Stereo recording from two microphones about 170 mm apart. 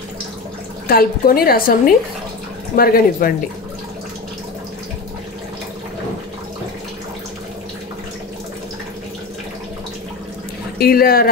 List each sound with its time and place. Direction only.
0.8 s a woman's voice: 60° left (ahead or behind)
10.8 s a woman's voice: 60° left (ahead or behind)